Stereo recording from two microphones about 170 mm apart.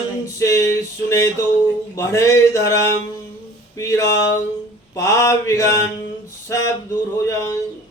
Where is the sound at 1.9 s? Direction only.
20° left (ahead or behind).